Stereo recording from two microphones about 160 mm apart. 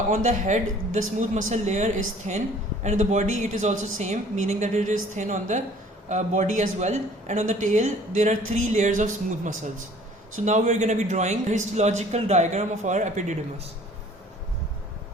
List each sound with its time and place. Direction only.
0.1 s speech: 50° right (ahead or behind)